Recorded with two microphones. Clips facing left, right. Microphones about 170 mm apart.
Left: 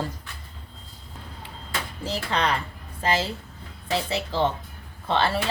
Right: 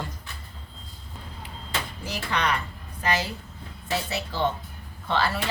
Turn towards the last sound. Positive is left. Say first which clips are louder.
# left 2 dB
turn(degrees=25)  # may be behind; listen again after turning